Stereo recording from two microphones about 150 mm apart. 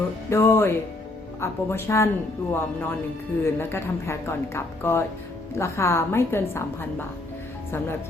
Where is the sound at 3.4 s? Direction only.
15° left (ahead or behind).